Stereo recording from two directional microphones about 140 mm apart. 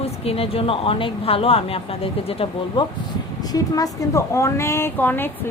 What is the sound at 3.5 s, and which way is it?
A woman's voice, 25° left (ahead or behind).